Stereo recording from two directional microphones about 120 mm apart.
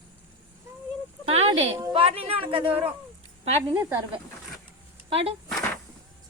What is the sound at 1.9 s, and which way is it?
Speech, 50° right (ahead or behind).